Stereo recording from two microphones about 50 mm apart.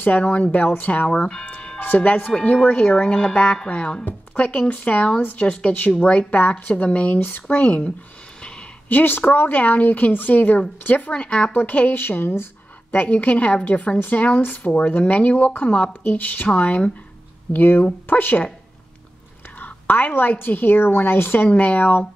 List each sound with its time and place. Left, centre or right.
0.0 s a woman's voice: left
1.1 s speech: centre
1.4 s music: left
2.0 s a woman's voice: left
3.1 s a woman's voice: left
7.2 s a woman's voice: left
7.4 s speech: left
8.4 s a sound: centre
8.8 s a woman's voice: left
11.1 s speech: left
11.5 s a woman's voice: left
12.0 s a woman's voice: left
17.5 s a woman's voice: left
19.6 s a woman's voice: left